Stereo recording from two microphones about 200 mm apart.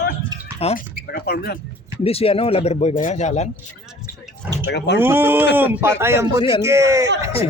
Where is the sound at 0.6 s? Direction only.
30° left (ahead or behind).